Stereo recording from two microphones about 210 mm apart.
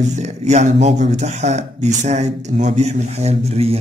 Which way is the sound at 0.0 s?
35° right (ahead or behind).